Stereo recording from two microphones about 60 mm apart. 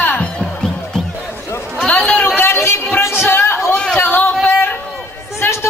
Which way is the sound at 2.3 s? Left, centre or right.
Left.